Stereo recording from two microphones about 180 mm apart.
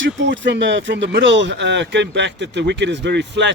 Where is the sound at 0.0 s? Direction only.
90° right.